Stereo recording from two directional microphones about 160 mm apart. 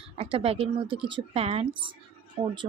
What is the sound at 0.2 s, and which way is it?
Speech, 35° right (ahead or behind).